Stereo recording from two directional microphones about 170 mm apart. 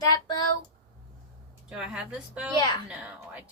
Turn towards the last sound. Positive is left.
turn(degrees=-10)  # may be behind; listen again after turning